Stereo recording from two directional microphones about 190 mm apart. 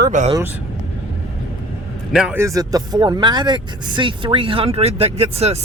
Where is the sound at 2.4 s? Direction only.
15° right (ahead or behind).